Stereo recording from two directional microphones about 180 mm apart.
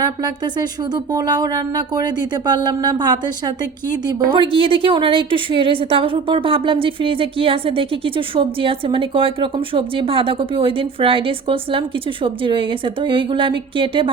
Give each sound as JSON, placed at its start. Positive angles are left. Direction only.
{"t": 0.0, "sound": "a woman's voice", "side_deg": -25}